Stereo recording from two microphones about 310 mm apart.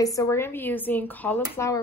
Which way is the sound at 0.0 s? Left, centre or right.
Centre.